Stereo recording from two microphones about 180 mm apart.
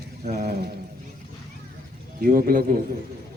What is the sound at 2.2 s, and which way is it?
Speech, 50° right (ahead or behind).